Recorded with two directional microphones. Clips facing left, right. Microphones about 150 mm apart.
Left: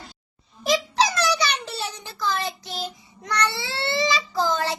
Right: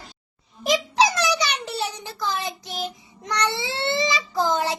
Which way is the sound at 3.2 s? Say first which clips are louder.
Right 1 dB; 20° right (ahead or behind).